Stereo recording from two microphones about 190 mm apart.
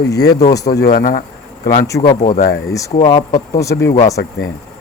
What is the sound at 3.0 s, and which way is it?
Speech, 20° left (ahead or behind).